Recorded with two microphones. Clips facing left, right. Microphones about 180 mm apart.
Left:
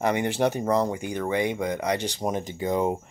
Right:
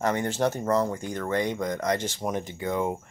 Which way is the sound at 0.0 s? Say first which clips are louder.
Left 2 dB; 15° left (ahead or behind).